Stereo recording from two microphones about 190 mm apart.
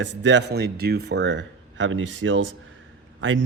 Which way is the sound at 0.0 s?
70° right (ahead or behind).